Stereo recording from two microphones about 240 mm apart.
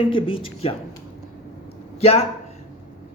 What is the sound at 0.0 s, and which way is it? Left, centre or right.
Speech, left.